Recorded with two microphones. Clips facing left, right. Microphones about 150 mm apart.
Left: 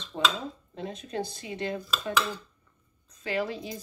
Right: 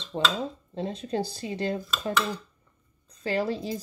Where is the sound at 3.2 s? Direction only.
35° right (ahead or behind).